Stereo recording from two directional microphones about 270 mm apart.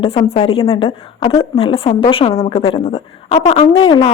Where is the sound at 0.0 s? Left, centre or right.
Left.